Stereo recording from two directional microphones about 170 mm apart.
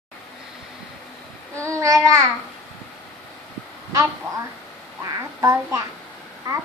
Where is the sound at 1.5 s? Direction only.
15° right (ahead or behind).